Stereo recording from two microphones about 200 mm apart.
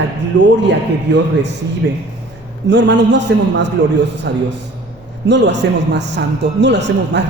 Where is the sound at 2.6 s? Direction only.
65° right (ahead or behind).